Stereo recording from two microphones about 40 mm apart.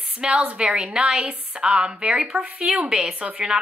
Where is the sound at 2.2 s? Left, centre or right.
Centre.